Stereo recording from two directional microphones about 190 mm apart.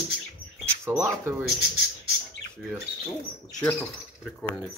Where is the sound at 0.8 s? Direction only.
15° right (ahead or behind).